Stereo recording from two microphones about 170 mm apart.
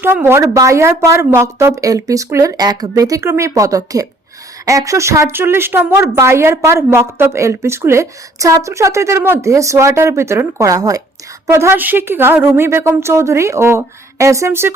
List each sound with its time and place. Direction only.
0.0 s a woman's voice: 15° right (ahead or behind)